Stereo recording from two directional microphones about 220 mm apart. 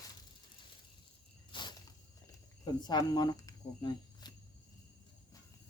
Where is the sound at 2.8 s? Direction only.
20° left (ahead or behind).